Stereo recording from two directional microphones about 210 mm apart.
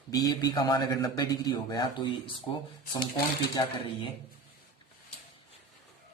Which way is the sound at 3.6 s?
20° left (ahead or behind).